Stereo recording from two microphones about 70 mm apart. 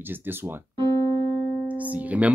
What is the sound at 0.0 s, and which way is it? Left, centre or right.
Speech, right.